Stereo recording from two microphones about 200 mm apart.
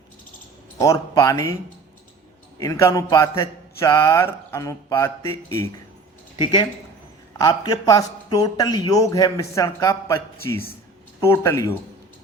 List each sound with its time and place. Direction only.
0.8 s a man's voice: 15° left (ahead or behind)
2.6 s a man's voice: 15° left (ahead or behind)
11.2 s a man's voice: 15° left (ahead or behind)